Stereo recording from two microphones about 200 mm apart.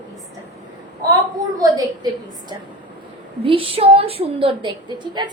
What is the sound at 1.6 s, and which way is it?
A woman's voice, 20° right (ahead or behind).